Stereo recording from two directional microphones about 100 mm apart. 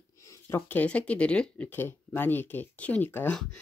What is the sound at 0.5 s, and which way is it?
Speech, 15° left (ahead or behind).